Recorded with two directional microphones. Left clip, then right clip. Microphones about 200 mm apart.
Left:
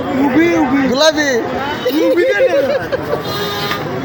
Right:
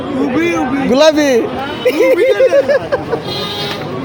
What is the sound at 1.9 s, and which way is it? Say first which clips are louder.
Speech: right 3 dB; 55° right (ahead or behind).